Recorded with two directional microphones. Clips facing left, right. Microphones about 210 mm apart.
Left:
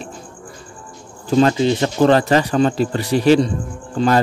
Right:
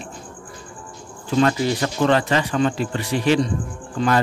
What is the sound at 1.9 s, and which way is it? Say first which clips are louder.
Speech: left 5 dB; 40° left (ahead or behind).